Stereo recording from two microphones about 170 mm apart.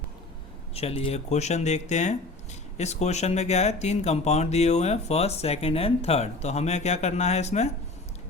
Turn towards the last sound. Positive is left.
turn(degrees=40)  # may be behind; listen again after turning